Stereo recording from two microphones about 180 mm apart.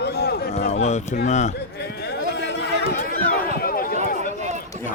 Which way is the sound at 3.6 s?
55° left (ahead or behind).